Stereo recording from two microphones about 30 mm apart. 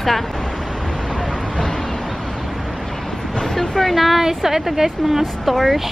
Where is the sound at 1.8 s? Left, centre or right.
Centre.